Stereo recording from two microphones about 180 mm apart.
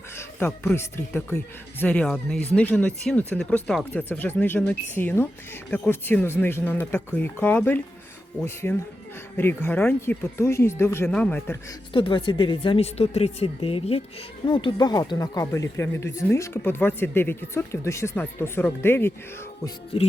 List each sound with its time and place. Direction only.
0.2 s speech: 10° left (ahead or behind)
11.9 s speech: 30° left (ahead or behind); by 19.1 s 15° left (ahead or behind)